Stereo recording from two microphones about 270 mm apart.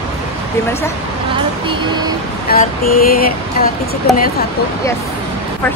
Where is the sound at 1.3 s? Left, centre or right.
Centre.